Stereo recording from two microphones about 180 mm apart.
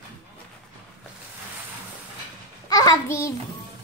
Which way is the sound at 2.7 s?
20° left (ahead or behind).